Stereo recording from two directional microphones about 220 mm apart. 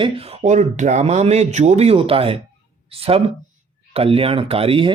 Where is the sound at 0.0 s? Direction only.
25° right (ahead or behind).